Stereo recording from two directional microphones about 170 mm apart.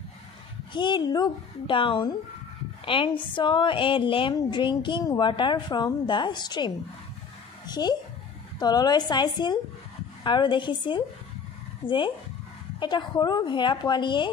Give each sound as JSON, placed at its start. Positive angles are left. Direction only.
{"t": 0.7, "sound": "a woman's voice", "side_deg": 25}